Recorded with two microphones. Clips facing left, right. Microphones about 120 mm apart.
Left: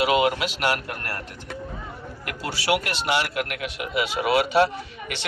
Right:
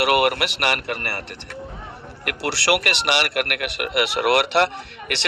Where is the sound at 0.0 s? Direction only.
70° right (ahead or behind).